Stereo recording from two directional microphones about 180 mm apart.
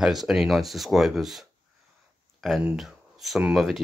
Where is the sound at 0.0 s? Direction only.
Centre (ahead or behind).